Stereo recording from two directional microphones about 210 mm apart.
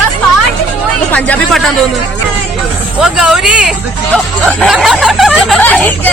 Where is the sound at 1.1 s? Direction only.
5° left (ahead or behind).